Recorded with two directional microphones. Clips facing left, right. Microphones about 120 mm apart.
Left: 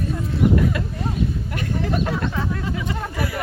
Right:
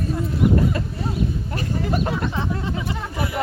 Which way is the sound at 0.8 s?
35° right (ahead or behind).